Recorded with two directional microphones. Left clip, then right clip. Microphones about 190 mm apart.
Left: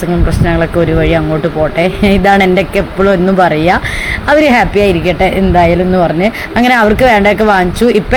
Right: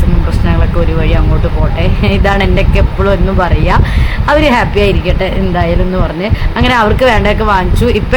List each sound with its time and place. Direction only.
1.8 s speech: 20° left (ahead or behind)